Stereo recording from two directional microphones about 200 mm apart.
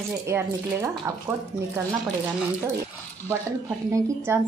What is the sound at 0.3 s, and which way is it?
Speech, 10° right (ahead or behind).